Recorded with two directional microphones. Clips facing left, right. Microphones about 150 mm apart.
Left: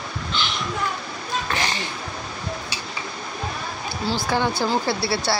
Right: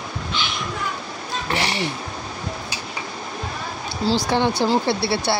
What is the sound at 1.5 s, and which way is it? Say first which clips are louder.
Cat: right 3 dB; 25° right (ahead or behind).